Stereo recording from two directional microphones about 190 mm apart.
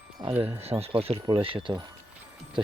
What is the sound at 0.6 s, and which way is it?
Speech, 30° right (ahead or behind).